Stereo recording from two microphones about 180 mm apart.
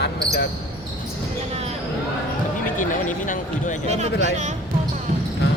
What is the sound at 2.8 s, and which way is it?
Speech, 45° left (ahead or behind).